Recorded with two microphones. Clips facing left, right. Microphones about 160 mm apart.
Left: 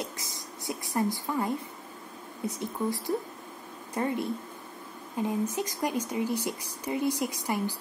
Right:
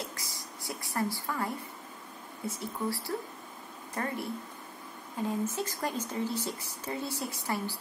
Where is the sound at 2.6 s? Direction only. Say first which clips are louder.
Left 3 dB; 20° left (ahead or behind).